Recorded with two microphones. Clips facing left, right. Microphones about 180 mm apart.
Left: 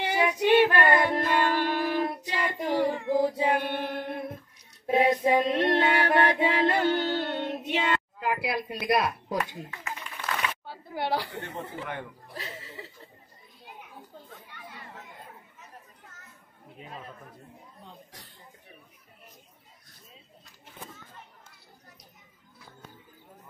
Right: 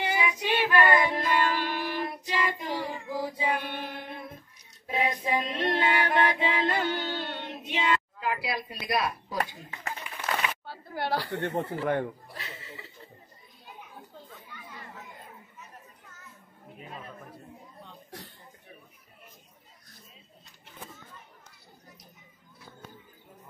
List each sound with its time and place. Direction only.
0.0 s music: 55° left (ahead or behind)
4.9 s female singing: 55° left (ahead or behind)
11.0 s a sound: 20° left (ahead or behind)
11.5 s speech: 45° right (ahead or behind)
14.5 s chatter: 60° left (ahead or behind)